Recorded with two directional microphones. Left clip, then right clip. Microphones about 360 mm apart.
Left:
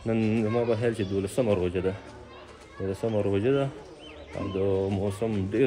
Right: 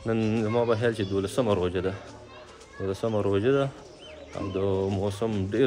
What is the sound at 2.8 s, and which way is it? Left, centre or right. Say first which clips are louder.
Speech: right 1 dB; centre.